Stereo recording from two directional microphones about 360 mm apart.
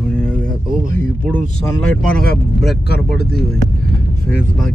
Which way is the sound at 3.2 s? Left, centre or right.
Left.